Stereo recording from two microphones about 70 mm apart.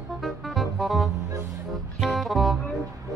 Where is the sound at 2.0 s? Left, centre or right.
Centre.